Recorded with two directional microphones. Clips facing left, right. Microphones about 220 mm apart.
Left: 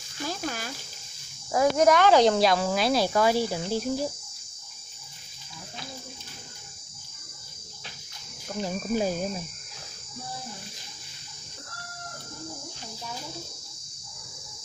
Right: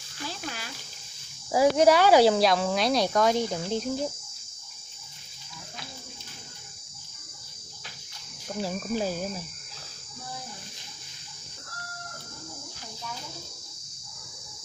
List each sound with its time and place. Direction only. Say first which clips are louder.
0.3 s a sound: left 6 dB; 45° left (ahead or behind)
1.5 s speech: right 1 dB; 10° right (ahead or behind); by 4.1 s 5° left (ahead or behind)
8.6 s speech: even; 5° right (ahead or behind)
8.9 s speech: left 3 dB; 20° left (ahead or behind)